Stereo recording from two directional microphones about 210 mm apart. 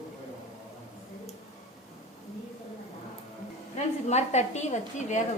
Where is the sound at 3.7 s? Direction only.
30° left (ahead or behind).